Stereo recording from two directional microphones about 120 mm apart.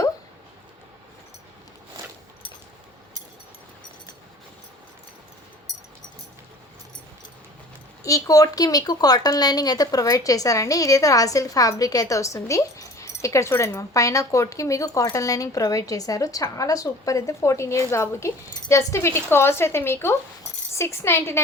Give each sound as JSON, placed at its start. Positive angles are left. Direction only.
{"t": 8.0, "sound": "speech", "side_deg": 30}